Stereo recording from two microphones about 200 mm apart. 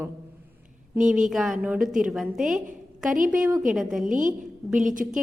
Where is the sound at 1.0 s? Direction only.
40° right (ahead or behind).